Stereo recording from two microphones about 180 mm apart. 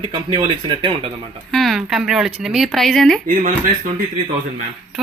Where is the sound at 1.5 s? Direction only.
Centre (ahead or behind).